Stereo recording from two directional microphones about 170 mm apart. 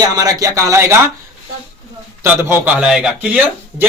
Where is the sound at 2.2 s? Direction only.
10° right (ahead or behind).